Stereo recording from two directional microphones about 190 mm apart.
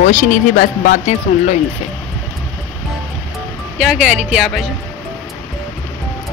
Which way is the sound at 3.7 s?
5° right (ahead or behind).